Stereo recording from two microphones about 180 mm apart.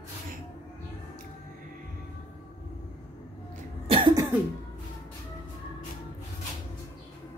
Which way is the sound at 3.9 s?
25° right (ahead or behind).